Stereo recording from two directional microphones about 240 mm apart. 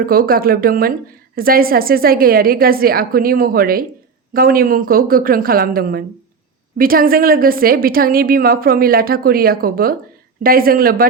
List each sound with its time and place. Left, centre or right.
0.0 s a woman's voice: right